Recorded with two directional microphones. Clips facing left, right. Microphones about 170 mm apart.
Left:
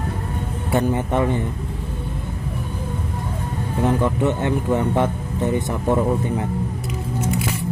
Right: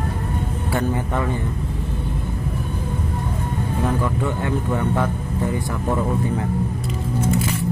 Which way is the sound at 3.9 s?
20° left (ahead or behind).